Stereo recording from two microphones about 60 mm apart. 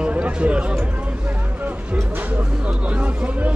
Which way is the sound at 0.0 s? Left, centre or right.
Right.